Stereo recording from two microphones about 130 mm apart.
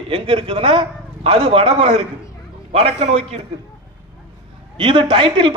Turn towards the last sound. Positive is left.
turn(degrees=-40)  # may be behind; listen again after turning